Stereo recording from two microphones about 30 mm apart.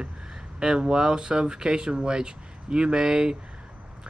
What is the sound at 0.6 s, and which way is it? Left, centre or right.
Speech, right.